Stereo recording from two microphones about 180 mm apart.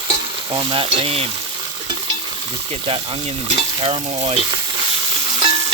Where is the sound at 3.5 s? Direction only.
35° right (ahead or behind).